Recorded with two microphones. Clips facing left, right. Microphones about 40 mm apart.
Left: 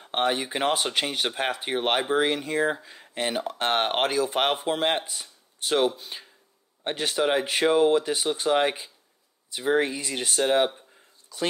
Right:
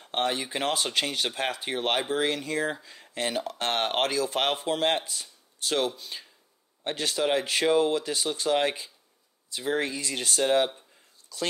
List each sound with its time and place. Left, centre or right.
0.0 s speech: left